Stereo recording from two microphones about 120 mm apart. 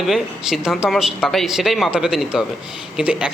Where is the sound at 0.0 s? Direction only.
5° right (ahead or behind).